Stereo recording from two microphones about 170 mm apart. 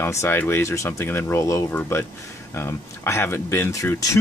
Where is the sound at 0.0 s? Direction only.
15° left (ahead or behind).